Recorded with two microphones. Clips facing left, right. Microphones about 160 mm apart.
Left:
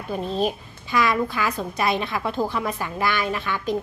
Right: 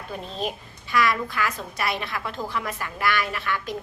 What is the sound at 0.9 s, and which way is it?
A woman's voice, 20° left (ahead or behind).